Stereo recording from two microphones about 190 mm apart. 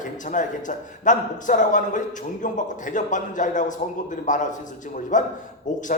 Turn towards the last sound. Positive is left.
turn(degrees=40)  # may be behind; listen again after turning